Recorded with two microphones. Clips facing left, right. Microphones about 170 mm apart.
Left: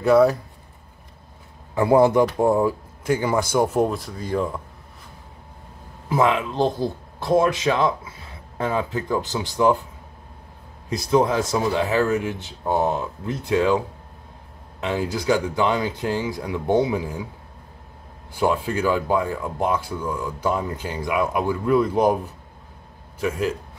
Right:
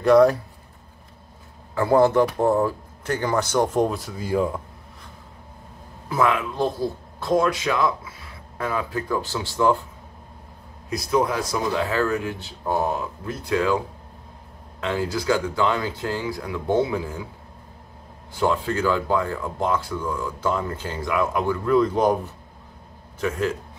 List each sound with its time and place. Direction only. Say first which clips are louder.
0.0 s speech: right 1 dB; centre (ahead or behind)
1.8 s speech: left 1 dB; 15° left (ahead or behind); by 4.6 s 5° right (ahead or behind)
6.0 s speech: left 2 dB; 20° left (ahead or behind)
10.9 s speech: left 3 dB; 25° left (ahead or behind)
14.8 s speech: even; 20° left (ahead or behind)
18.3 s speech: left 1 dB; 15° left (ahead or behind)